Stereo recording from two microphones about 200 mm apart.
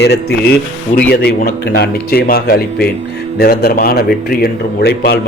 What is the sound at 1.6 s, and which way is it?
Speech, 50° left (ahead or behind).